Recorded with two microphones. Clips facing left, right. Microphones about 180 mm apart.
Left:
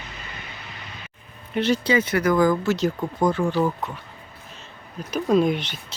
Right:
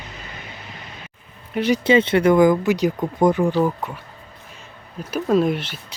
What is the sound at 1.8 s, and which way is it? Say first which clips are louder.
Speech: right 5 dB; 25° right (ahead or behind).